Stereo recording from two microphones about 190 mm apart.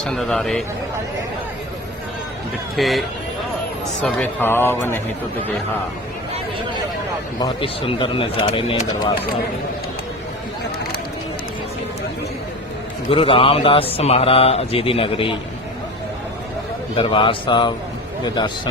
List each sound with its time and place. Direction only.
0.0 s a man's voice: 5° left (ahead or behind)
2.7 s a man's voice: centre (ahead or behind)
4.0 s a man's voice: 10° left (ahead or behind)
7.3 s a man's voice: 25° left (ahead or behind)
13.1 s a man's voice: 30° left (ahead or behind)
17.0 s a man's voice: 25° left (ahead or behind)